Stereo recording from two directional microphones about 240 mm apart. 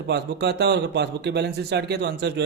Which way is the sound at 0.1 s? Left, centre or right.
Right.